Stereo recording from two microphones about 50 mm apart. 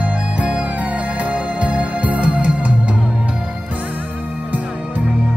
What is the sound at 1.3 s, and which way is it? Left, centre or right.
Music, right.